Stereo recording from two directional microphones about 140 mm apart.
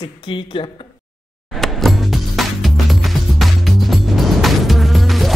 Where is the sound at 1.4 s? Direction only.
Centre (ahead or behind).